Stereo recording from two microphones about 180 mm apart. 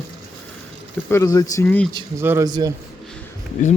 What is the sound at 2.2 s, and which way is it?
Speech, 20° right (ahead or behind).